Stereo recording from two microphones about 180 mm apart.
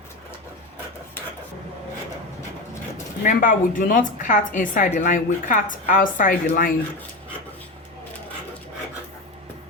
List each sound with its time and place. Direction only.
3.2 s a woman's voice: 50° left (ahead or behind)